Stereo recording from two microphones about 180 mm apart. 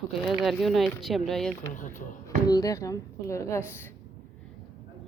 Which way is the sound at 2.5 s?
20° left (ahead or behind).